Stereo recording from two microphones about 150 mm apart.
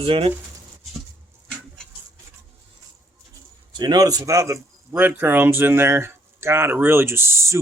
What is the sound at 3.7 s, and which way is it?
A man's voice, 30° right (ahead or behind).